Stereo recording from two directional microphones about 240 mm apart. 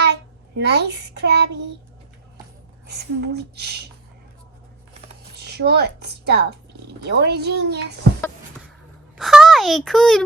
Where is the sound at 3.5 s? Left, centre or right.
Right.